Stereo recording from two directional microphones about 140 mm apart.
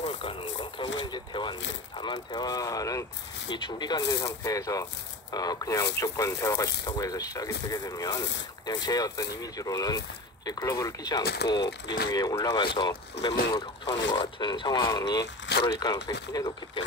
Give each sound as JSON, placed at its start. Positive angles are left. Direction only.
{"t": 0.2, "sound": "speech", "side_deg": 40}